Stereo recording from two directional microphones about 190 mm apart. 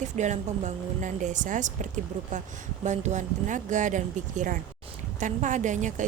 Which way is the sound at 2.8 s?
40° right (ahead or behind).